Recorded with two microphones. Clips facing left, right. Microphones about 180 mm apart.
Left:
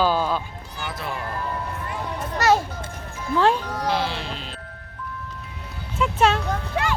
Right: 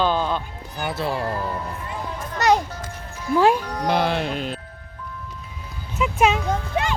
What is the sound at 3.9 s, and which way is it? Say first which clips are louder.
Speech: right 5 dB; 55° right (ahead or behind).